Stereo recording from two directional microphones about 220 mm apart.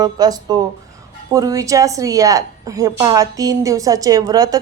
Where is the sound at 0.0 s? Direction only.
15° right (ahead or behind).